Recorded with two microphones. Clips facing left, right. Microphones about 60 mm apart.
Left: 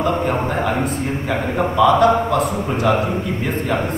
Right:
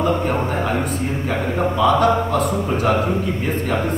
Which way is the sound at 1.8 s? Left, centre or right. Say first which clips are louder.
Left 3 dB; left.